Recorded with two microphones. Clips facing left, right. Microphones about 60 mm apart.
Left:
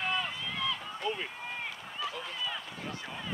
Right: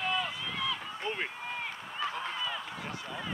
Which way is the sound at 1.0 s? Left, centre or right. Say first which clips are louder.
Left 1 dB; right.